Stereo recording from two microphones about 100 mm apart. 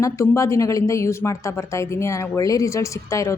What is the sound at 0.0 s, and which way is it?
A woman's voice, 30° left (ahead or behind).